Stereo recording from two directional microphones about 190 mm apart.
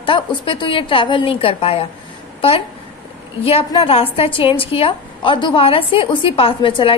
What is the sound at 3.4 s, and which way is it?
A woman's voice, 30° left (ahead or behind).